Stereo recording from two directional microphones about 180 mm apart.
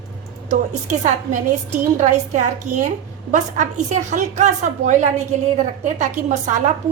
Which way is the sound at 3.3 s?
45° right (ahead or behind).